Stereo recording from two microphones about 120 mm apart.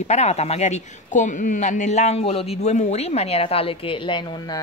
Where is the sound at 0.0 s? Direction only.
70° left (ahead or behind).